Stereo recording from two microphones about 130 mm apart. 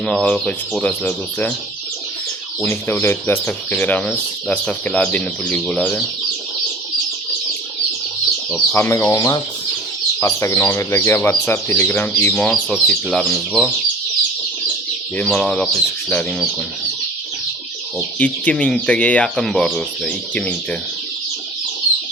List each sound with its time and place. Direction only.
0.0 s speech: 5° left (ahead or behind)
2.6 s speech: 15° left (ahead or behind)
8.7 s speech: 15° left (ahead or behind)
15.2 s speech: 10° left (ahead or behind)
17.9 s speech: 10° left (ahead or behind)